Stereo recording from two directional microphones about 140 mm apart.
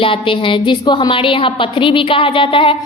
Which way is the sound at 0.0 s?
40° left (ahead or behind).